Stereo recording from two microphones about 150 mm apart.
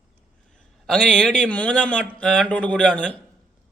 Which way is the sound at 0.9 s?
5° left (ahead or behind).